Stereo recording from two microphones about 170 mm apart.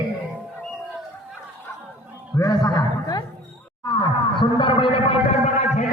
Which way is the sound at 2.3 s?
20° left (ahead or behind).